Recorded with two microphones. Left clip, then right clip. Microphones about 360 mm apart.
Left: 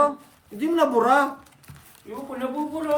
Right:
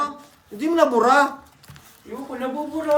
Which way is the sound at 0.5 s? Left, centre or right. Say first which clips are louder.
Right 3 dB; centre.